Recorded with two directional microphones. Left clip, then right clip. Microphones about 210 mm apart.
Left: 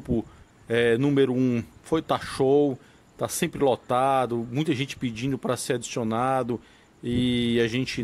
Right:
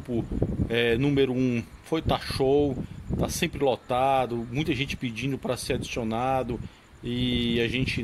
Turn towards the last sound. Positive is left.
turn(degrees=20)  # may be behind; listen again after turning